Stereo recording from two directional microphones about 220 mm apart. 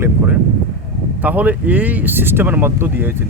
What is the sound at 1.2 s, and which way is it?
Speech, 5° right (ahead or behind).